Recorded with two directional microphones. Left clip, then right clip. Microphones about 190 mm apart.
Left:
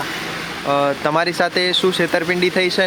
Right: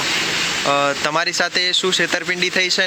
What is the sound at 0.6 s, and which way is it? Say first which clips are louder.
Speech: left 3 dB; centre (ahead or behind).